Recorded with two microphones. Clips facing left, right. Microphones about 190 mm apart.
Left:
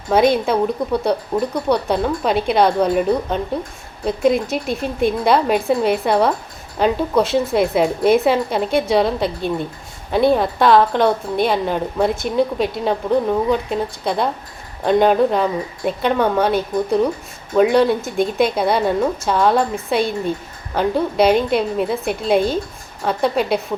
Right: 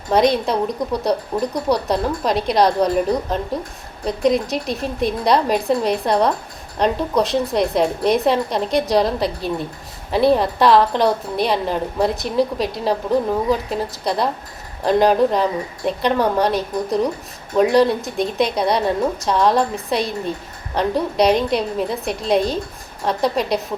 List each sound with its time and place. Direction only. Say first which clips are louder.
0.1 s a woman's voice: left 1 dB; 5° left (ahead or behind)